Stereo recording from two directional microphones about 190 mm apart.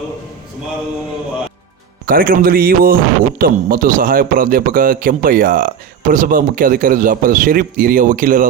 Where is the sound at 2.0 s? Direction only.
50° right (ahead or behind).